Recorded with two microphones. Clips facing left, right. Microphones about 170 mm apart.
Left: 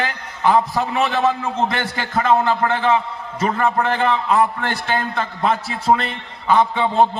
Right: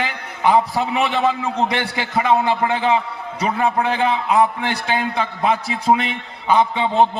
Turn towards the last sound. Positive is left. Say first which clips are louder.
# even
turn(degrees=-15)  # may be behind; listen again after turning